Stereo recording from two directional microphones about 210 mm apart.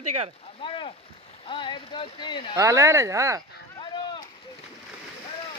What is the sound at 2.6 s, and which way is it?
Speech, 15° right (ahead or behind).